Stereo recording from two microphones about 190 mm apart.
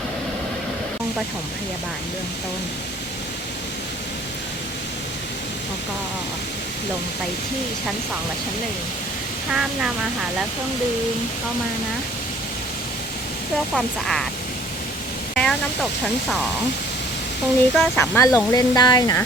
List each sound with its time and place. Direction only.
9.5 s speech: 5° right (ahead or behind)
13.7 s speech: 5° left (ahead or behind)
15.4 s speech: 5° left (ahead or behind)
17.7 s speech: 10° left (ahead or behind)